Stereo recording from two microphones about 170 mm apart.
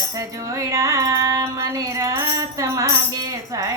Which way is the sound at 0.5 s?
20° right (ahead or behind).